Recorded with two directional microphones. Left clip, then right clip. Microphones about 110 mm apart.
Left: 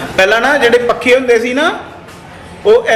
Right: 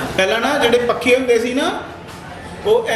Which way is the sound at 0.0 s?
15° left (ahead or behind).